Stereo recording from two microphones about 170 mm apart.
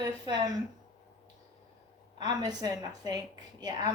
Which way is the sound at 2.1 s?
25° right (ahead or behind).